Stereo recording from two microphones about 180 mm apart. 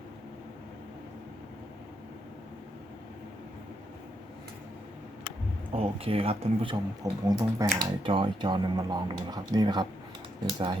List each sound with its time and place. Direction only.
5.7 s speech: 30° right (ahead or behind)